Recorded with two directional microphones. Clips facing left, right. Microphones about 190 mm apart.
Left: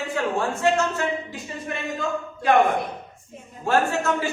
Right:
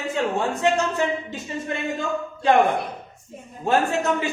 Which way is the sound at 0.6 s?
20° right (ahead or behind).